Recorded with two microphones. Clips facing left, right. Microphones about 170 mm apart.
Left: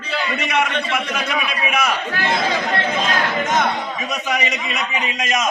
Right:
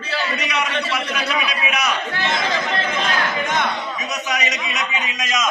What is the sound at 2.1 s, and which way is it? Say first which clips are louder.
Speech: left 2 dB; 15° left (ahead or behind).